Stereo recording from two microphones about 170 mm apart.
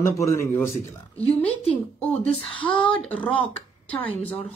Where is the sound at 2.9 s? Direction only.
10° left (ahead or behind).